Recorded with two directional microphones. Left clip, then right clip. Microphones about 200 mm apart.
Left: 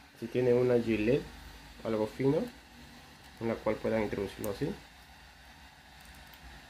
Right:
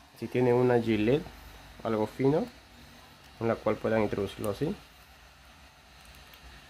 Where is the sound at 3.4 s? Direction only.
40° right (ahead or behind).